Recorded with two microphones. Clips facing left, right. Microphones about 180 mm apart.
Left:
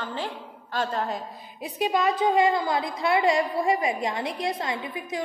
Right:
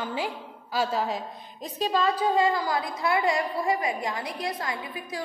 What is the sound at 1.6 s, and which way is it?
A woman's voice, 15° left (ahead or behind).